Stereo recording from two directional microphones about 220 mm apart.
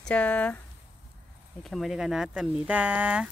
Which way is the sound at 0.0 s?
5° left (ahead or behind).